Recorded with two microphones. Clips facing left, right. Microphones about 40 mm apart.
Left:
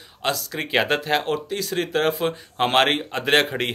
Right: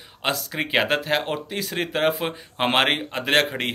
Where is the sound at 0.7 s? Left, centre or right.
Centre.